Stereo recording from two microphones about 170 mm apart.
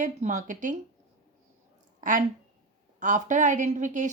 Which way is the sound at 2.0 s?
50° right (ahead or behind).